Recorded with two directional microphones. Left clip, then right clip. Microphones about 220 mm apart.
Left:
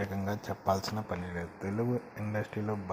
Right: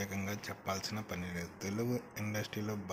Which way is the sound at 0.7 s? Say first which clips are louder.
Left 8 dB; 25° left (ahead or behind).